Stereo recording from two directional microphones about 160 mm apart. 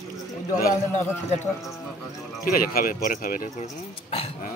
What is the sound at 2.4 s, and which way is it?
Speech, 65° left (ahead or behind).